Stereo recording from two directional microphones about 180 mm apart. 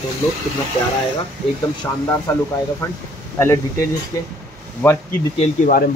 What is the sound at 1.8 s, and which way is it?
Speech, 15° left (ahead or behind).